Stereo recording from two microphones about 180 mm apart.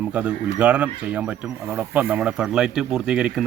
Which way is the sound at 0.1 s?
5° right (ahead or behind).